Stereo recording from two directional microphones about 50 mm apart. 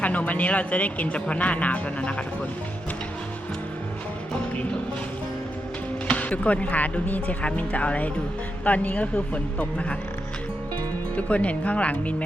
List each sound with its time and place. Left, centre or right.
0.0 s speech: left
6.1 s speech: left
11.1 s speech: left